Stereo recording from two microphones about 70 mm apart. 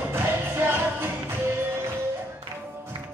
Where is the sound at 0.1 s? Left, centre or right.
Right.